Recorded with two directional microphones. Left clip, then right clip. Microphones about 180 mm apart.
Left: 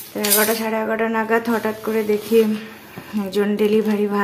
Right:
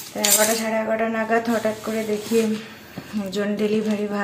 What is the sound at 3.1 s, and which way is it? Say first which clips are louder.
Speech: left 5 dB; 45° left (ahead or behind).